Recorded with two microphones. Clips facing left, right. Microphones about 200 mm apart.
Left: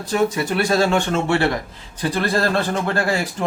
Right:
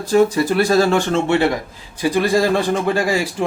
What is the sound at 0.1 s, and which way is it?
Speech, 35° right (ahead or behind).